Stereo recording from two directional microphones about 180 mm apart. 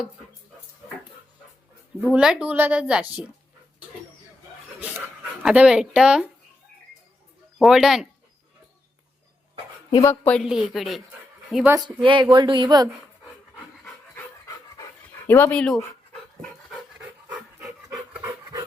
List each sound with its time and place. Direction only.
2.0 s speech: 5° right (ahead or behind)
4.9 s speech: 5° right (ahead or behind)
7.6 s speech: centre (ahead or behind)
9.9 s a woman's voice: 15° left (ahead or behind)
10.4 s a woman's voice: centre (ahead or behind)
12.0 s speech: 25° right (ahead or behind)
15.3 s a woman's voice: 10° left (ahead or behind)
16.4 s pant: centre (ahead or behind)
17.9 s pant: 5° right (ahead or behind)